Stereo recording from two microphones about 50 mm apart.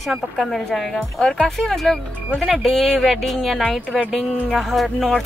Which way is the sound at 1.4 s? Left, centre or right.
Centre.